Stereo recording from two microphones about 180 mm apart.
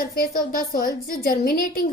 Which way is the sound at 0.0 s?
55° left (ahead or behind).